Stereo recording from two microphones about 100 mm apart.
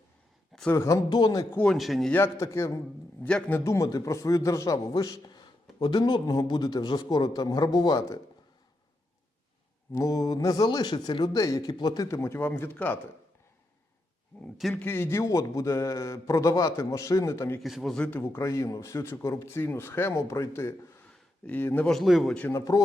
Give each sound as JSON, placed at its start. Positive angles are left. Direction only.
{"t": 0.7, "sound": "a man's voice", "side_deg": 30}
{"t": 1.6, "sound": "a man's voice", "side_deg": 0}
{"t": 2.0, "sound": "a man's voice", "side_deg": 25}
{"t": 5.8, "sound": "a man's voice", "side_deg": 50}
{"t": 9.9, "sound": "a man's voice", "side_deg": 35}
{"t": 11.7, "sound": "a man's voice", "side_deg": 45}
{"t": 12.0, "sound": "a man's voice", "side_deg": 30}
{"t": 14.8, "sound": "a man's voice", "side_deg": 20}
{"t": 17.6, "sound": "a man's voice", "side_deg": 0}
{"t": 17.9, "sound": "speech", "side_deg": 10}
{"t": 18.2, "sound": "a man's voice", "side_deg": 25}
{"t": 21.1, "sound": "a sound", "side_deg": 15}
{"t": 21.8, "sound": "a man's voice", "side_deg": 0}
{"t": 22.5, "sound": "a man's voice", "side_deg": 35}